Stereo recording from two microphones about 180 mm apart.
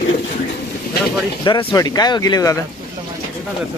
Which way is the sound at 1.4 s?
25° left (ahead or behind).